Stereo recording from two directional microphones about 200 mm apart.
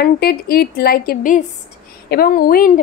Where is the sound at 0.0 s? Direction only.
50° left (ahead or behind).